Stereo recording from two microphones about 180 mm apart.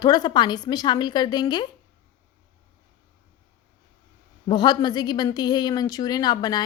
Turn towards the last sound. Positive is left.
turn(degrees=25)  # may be behind; listen again after turning